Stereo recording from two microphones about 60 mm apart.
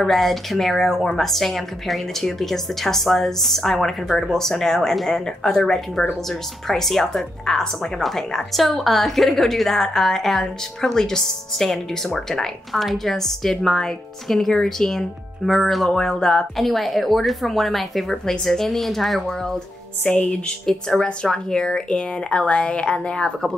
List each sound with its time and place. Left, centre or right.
0.0 s speech: centre